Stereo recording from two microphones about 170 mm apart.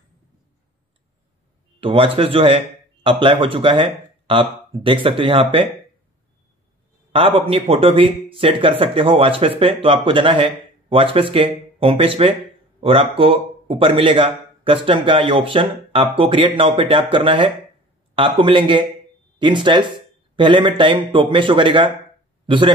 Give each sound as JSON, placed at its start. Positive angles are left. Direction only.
{"t": 1.8, "sound": "speech", "side_deg": -30}
{"t": 7.1, "sound": "speech", "side_deg": -35}